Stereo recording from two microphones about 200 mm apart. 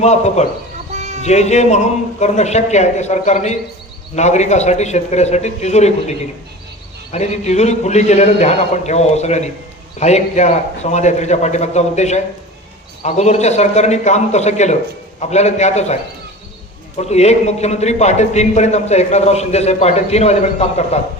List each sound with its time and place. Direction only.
0.0 s a man's voice: 35° left (ahead or behind)
0.9 s music: 35° right (ahead or behind)
1.2 s a man's voice: 35° left (ahead or behind)
17.0 s a man's voice: 35° left (ahead or behind)